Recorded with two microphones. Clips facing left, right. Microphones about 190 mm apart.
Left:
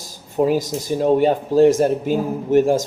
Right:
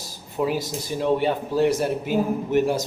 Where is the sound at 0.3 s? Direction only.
45° left (ahead or behind).